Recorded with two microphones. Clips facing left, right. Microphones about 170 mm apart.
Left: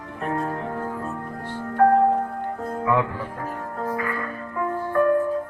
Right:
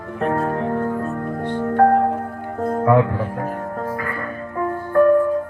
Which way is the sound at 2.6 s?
50° right (ahead or behind).